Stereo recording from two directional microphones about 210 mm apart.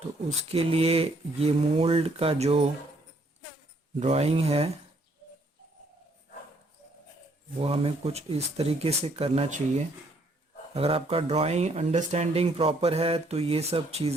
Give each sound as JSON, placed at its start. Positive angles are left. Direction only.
{"t": 0.4, "sound": "speech", "side_deg": -30}
{"t": 4.0, "sound": "speech", "side_deg": -30}
{"t": 7.6, "sound": "speech", "side_deg": -30}